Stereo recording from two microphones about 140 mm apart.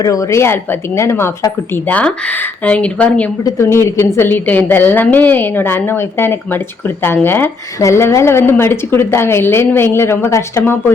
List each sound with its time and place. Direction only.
0.0 s a woman's voice: 25° left (ahead or behind)
1.9 s a woman's voice: 10° left (ahead or behind)